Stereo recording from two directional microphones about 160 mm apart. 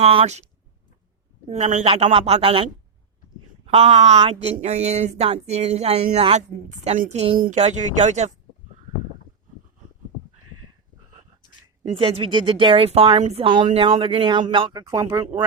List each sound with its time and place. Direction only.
0.0 s a woman's voice: 35° right (ahead or behind)
1.5 s a woman's voice: 40° right (ahead or behind)
3.7 s a woman's voice: 40° right (ahead or behind)
7.3 s speech: 60° right (ahead or behind)
7.6 s speech: 45° right (ahead or behind)
11.9 s a woman's voice: 35° right (ahead or behind); by 15.3 s 20° right (ahead or behind)